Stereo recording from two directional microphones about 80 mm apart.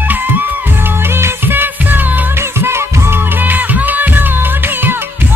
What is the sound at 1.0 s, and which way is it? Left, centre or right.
Music, right.